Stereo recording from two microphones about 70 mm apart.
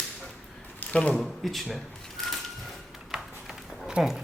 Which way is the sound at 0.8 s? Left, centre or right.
Centre.